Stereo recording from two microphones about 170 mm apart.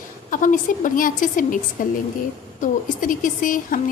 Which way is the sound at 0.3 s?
50° left (ahead or behind).